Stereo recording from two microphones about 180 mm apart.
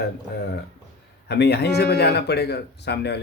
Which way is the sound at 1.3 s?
65° left (ahead or behind).